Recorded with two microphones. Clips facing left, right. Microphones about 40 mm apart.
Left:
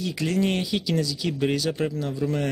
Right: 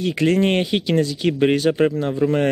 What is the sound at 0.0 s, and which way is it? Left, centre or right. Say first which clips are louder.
Speech: right 7 dB; right.